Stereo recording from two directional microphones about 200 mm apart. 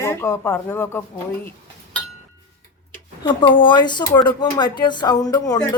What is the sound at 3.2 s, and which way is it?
Speech, 25° left (ahead or behind).